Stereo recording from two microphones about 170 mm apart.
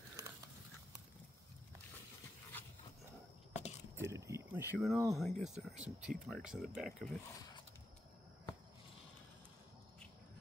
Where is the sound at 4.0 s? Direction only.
15° right (ahead or behind).